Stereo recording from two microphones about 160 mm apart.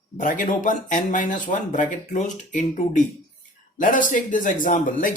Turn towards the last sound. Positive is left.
turn(degrees=55)  # may be behind; listen again after turning